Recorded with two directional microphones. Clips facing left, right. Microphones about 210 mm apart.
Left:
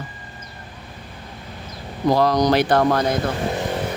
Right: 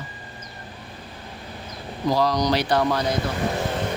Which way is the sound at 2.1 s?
55° left (ahead or behind).